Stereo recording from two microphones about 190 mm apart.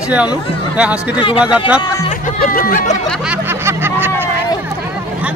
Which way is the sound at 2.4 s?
45° left (ahead or behind).